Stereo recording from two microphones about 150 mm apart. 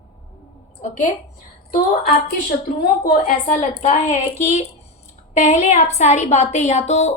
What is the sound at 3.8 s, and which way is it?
A woman's voice, 45° left (ahead or behind).